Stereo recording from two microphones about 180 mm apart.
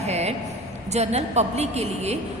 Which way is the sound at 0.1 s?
35° right (ahead or behind).